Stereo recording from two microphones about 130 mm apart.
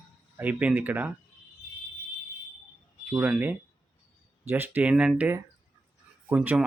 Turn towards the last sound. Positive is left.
turn(degrees=-10)  # may be behind; listen again after turning